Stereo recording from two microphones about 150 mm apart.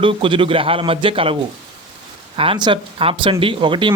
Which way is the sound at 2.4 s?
35° right (ahead or behind).